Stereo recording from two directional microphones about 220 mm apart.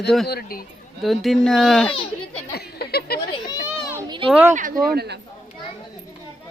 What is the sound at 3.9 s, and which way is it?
Children playing, 20° right (ahead or behind).